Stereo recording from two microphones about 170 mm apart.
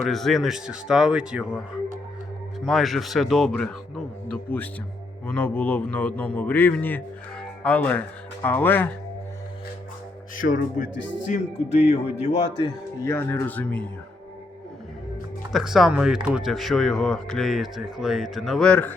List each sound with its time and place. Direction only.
0.1 s speech: centre (ahead or behind)
2.6 s a man's voice: centre (ahead or behind)
10.3 s a man's voice: 50° left (ahead or behind)
12.5 s speech: 25° left (ahead or behind)
13.1 s speech: 10° left (ahead or behind)
15.5 s speech: centre (ahead or behind)